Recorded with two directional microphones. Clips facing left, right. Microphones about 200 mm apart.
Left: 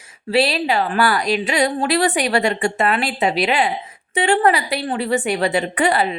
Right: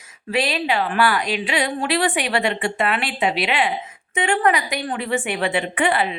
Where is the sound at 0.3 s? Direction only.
35° left (ahead or behind).